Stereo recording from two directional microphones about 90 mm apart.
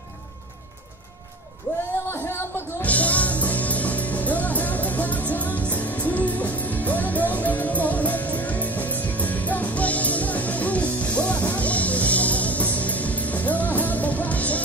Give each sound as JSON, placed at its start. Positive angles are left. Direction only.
{"t": 2.0, "sound": "music", "side_deg": 25}